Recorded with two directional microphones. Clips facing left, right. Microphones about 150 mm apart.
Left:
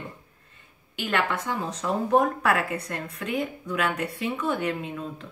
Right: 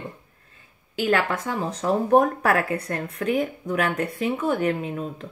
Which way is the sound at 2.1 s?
50° right (ahead or behind).